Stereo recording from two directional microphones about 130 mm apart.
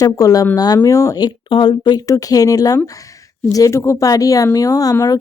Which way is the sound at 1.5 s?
40° left (ahead or behind).